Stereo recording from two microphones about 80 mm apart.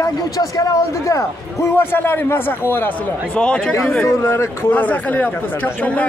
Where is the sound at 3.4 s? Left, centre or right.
Centre.